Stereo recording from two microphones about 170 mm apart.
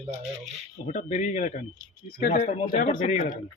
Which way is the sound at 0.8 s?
45° left (ahead or behind).